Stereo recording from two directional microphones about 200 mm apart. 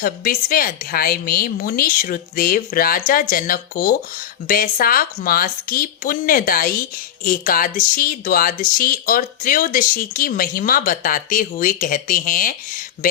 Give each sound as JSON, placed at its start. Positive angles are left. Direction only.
{"t": 0.0, "sound": "speech", "side_deg": 45}